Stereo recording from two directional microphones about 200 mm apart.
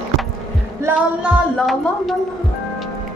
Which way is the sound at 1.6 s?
Centre (ahead or behind).